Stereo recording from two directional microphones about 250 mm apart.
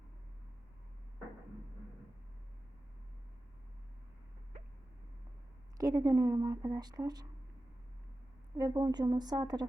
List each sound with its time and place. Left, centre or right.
5.7 s speech: centre
8.5 s speech: centre